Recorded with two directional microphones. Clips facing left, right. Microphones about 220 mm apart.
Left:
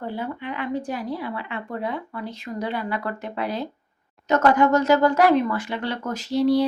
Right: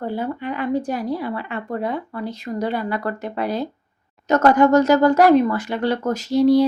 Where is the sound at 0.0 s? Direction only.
40° right (ahead or behind).